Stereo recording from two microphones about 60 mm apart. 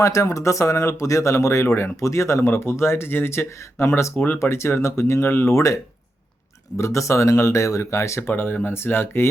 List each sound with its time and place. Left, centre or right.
0.0 s speech: left
6.7 s speech: left
8.3 s speech: left